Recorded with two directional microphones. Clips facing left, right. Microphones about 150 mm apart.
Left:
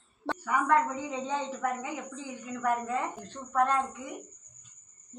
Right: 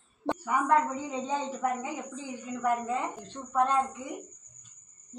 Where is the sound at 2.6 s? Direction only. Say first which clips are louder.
Right 1 dB; 20° right (ahead or behind).